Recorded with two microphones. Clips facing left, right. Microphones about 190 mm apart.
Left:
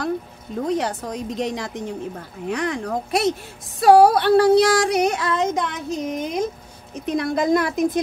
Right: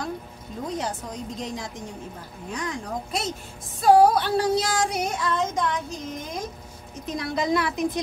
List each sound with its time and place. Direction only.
0.7 s child singing: 70° left (ahead or behind)
2.5 s speech: 65° left (ahead or behind)
3.8 s child singing: 70° left (ahead or behind)
7.1 s a woman's voice: 55° left (ahead or behind)